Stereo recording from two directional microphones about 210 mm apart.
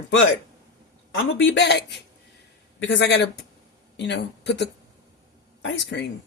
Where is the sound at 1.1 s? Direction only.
65° left (ahead or behind).